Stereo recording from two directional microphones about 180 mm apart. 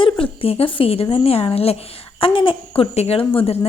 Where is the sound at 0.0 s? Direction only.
30° left (ahead or behind).